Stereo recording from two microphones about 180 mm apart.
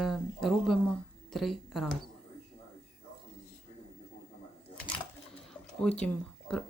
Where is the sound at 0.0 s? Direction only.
Centre (ahead or behind).